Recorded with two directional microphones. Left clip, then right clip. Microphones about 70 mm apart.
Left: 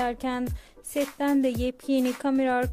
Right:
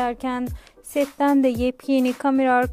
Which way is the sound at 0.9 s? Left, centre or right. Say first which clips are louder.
Right 6 dB; right.